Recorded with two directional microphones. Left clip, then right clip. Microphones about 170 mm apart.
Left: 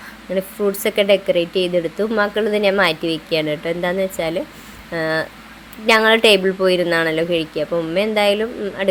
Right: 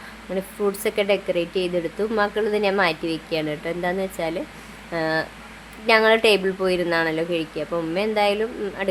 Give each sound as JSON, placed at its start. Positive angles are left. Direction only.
{"t": 0.3, "sound": "speech", "side_deg": 15}